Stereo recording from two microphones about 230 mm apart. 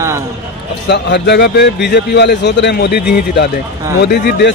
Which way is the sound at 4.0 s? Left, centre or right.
Left.